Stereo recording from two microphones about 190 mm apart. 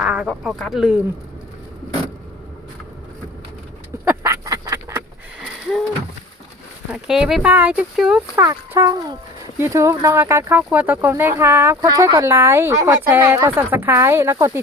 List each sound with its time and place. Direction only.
0.0 s speech: 5° right (ahead or behind)
4.0 s duck: 15° right (ahead or behind)
6.9 s speech: 5° right (ahead or behind)
8.4 s fowl: 15° right (ahead or behind)
9.6 s speech: 15° right (ahead or behind)